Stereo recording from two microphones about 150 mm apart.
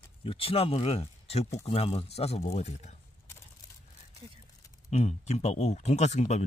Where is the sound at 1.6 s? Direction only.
45° left (ahead or behind).